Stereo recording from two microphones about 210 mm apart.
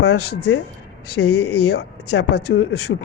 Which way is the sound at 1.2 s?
90° left.